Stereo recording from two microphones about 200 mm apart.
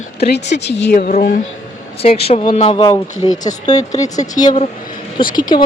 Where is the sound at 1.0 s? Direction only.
40° left (ahead or behind).